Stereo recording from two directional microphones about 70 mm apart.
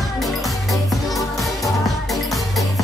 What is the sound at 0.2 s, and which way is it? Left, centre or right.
Music, centre.